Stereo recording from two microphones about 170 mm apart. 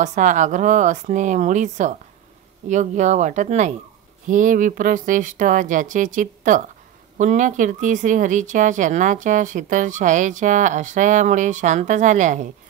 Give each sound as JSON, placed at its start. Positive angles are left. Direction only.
{"t": 0.0, "sound": "speech", "side_deg": -45}